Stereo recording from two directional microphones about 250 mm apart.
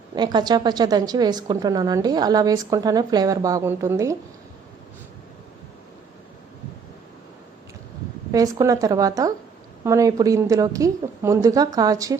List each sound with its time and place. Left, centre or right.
0.2 s a woman's voice: centre
8.3 s a woman's voice: centre